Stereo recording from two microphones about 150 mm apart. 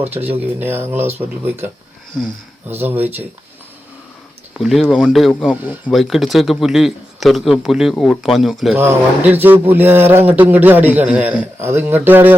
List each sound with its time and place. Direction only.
0.1 s a man's voice: 10° right (ahead or behind)
4.5 s a man's voice: centre (ahead or behind)
5.9 s speech: centre (ahead or behind)
8.8 s a man's voice: 15° right (ahead or behind)